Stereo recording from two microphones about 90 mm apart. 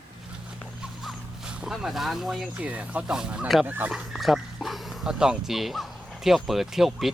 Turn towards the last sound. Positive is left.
turn(degrees=-5)  # may be behind; listen again after turning